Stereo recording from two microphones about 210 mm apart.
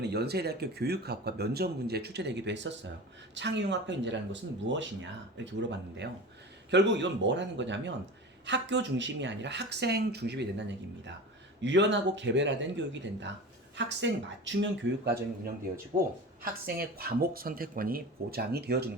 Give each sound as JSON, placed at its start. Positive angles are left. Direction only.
{"t": 0.0, "sound": "speech", "side_deg": -50}
{"t": 6.7, "sound": "speech", "side_deg": -55}
{"t": 15.9, "sound": "speech", "side_deg": -35}
{"t": 16.4, "sound": "speech", "side_deg": -45}